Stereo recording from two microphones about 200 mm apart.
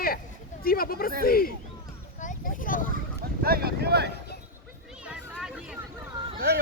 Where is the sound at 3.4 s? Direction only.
50° right (ahead or behind).